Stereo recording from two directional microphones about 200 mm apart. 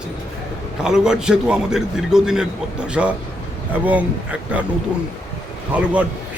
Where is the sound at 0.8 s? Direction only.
5° right (ahead or behind).